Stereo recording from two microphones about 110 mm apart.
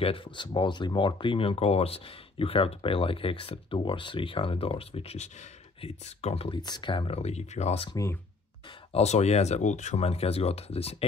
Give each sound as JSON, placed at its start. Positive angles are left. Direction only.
{"t": 0.0, "sound": "speech", "side_deg": 55}
{"t": 6.6, "sound": "speech", "side_deg": 45}
{"t": 7.9, "sound": "speech", "side_deg": 30}
{"t": 8.9, "sound": "speech", "side_deg": 85}